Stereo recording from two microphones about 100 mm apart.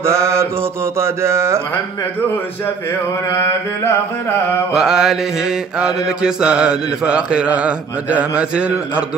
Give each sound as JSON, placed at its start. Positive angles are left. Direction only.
{"t": 0.0, "sound": "mantra", "side_deg": -30}
{"t": 0.9, "sound": "a sound", "side_deg": -25}
{"t": 4.7, "sound": "mantra", "side_deg": -5}